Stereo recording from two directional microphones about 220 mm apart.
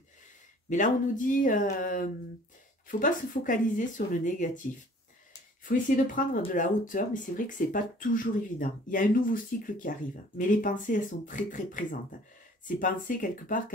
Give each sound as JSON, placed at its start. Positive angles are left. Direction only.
{"t": 0.7, "sound": "speech", "side_deg": 35}
{"t": 5.7, "sound": "speech", "side_deg": 40}